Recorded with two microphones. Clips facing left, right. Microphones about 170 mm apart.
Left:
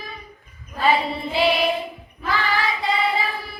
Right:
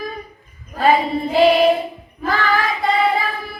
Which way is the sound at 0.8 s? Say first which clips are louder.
Right 5 dB; 45° right (ahead or behind).